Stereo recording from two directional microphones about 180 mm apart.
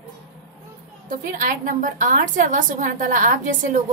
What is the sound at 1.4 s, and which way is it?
A woman's voice, 45° right (ahead or behind).